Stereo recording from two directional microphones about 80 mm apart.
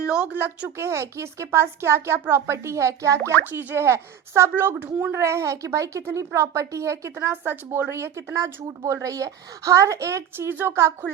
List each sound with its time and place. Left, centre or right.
0.0 s speech: centre
0.8 s speech: right
3.5 s speech: right
3.8 s speech: right
4.9 s a child's voice: centre
5.1 s speech: right